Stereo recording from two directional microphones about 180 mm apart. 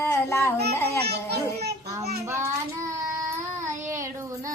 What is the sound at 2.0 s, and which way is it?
Child singing, 15° right (ahead or behind).